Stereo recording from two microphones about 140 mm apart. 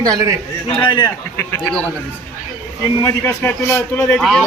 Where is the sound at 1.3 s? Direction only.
20° left (ahead or behind).